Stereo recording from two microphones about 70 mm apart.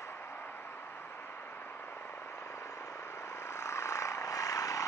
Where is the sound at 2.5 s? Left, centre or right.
Left.